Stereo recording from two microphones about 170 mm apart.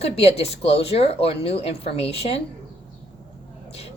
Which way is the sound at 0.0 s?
35° left (ahead or behind).